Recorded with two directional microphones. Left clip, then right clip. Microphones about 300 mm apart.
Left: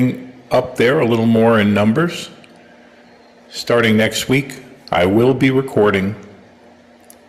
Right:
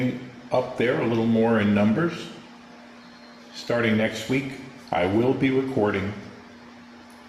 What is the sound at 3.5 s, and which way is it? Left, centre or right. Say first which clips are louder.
Speech: left 9 dB; left.